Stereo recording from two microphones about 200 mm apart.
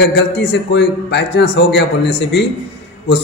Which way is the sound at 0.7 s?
55° left (ahead or behind).